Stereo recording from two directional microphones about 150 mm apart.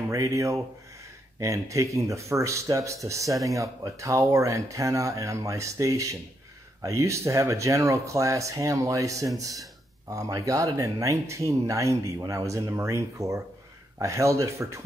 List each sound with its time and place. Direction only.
0.1 s speech: 20° right (ahead or behind)